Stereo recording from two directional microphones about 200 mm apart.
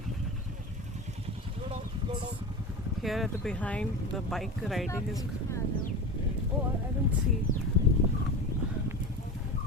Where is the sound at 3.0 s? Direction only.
Centre (ahead or behind).